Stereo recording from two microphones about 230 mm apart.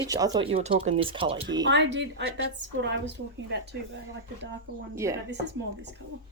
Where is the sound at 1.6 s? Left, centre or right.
Right.